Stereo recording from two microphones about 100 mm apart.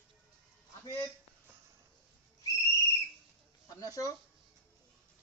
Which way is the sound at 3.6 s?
35° left (ahead or behind).